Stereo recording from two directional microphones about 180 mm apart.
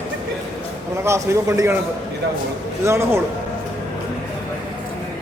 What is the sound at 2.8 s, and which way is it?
Speech, 15° right (ahead or behind).